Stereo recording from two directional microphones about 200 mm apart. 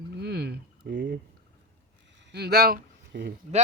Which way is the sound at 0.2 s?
55° right (ahead or behind).